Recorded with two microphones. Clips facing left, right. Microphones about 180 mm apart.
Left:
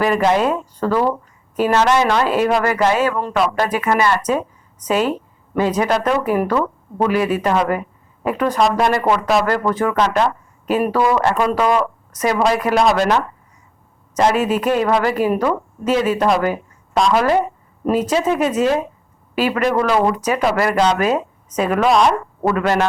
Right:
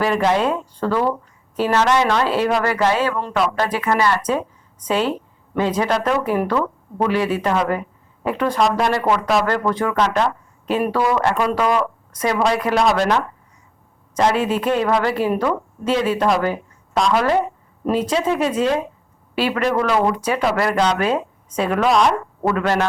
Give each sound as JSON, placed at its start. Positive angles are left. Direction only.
{"t": 0.0, "sound": "speech", "side_deg": 10}
{"t": 11.0, "sound": "speech", "side_deg": 20}
{"t": 11.6, "sound": "a woman's voice", "side_deg": 5}